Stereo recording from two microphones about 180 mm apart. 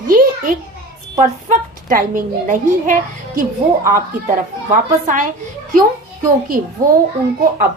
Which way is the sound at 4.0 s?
50° right (ahead or behind).